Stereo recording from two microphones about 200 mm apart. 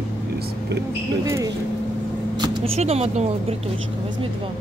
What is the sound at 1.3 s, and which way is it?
Speech, 15° right (ahead or behind).